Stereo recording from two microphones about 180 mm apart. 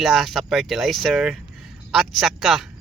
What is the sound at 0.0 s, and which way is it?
A man's voice, centre (ahead or behind).